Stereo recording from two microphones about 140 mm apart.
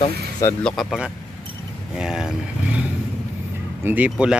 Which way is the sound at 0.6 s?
Centre (ahead or behind).